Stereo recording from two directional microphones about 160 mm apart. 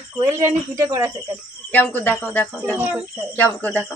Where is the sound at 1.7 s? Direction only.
10° left (ahead or behind).